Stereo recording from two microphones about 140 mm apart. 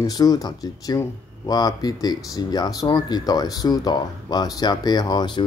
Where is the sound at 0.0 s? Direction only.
25° left (ahead or behind).